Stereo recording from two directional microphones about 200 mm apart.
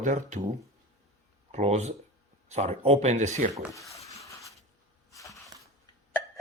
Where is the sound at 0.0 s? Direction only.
40° right (ahead or behind).